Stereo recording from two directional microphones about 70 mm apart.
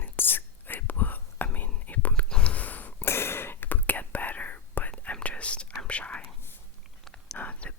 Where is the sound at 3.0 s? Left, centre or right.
Left; by 7.4 s centre.